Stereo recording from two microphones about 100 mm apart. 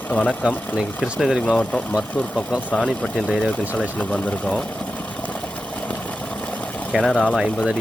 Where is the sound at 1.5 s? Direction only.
5° left (ahead or behind).